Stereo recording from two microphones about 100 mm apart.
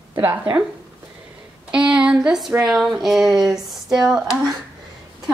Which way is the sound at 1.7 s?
10° right (ahead or behind).